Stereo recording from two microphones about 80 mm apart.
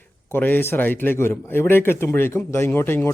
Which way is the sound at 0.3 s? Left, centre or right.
Left.